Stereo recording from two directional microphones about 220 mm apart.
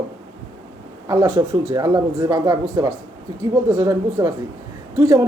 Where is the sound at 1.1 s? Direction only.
15° right (ahead or behind).